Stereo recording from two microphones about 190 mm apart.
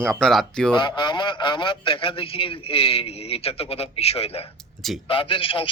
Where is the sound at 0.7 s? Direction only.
25° left (ahead or behind).